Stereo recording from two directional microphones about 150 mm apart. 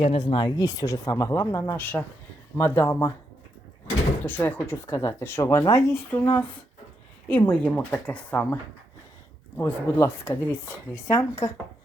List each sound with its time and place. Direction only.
0.0 s speech: 40° left (ahead or behind); by 3.1 s 15° left (ahead or behind)
4.2 s speech: 15° left (ahead or behind)
7.3 s speech: 10° left (ahead or behind)
9.6 s speech: 15° left (ahead or behind)